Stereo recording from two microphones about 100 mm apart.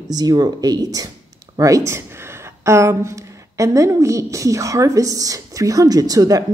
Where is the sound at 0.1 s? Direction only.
40° right (ahead or behind).